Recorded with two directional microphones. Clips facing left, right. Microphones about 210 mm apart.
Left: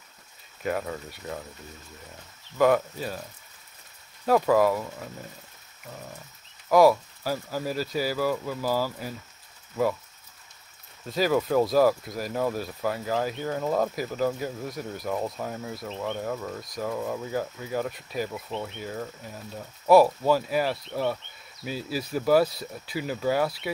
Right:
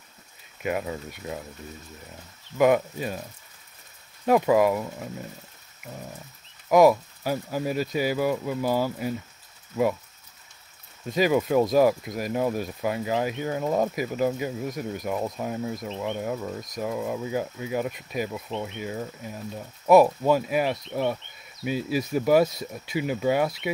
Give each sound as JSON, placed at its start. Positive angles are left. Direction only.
{"t": 0.6, "sound": "speech", "side_deg": -15}
{"t": 2.5, "sound": "speech", "side_deg": -15}
{"t": 4.3, "sound": "speech", "side_deg": -15}
{"t": 6.7, "sound": "speech", "side_deg": -20}
{"t": 11.1, "sound": "speech", "side_deg": -15}